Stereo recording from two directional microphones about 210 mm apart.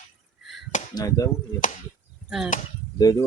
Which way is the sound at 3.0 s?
15° left (ahead or behind).